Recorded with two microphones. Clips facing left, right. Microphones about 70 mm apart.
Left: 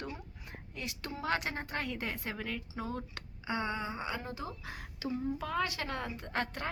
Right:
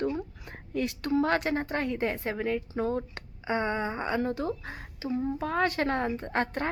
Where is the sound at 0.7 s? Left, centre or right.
Right.